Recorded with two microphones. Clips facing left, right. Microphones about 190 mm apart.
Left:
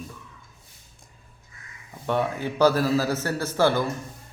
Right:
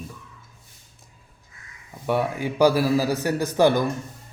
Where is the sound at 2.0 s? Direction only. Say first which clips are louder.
Right 2 dB; 10° right (ahead or behind).